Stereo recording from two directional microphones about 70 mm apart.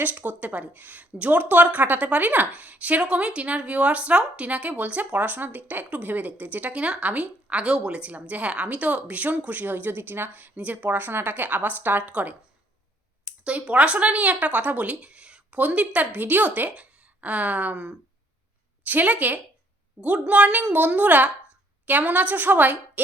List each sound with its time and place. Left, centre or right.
0.0 s a woman's voice: right